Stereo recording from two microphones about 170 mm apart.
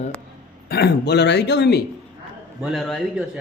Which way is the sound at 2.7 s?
Centre (ahead or behind).